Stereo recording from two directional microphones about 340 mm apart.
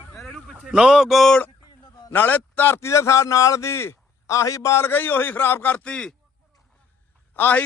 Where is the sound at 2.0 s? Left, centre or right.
Centre.